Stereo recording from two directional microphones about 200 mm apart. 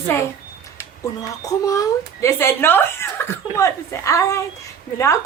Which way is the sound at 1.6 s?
15° left (ahead or behind).